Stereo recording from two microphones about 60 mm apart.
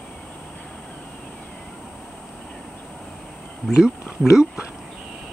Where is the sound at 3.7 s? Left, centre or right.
Centre.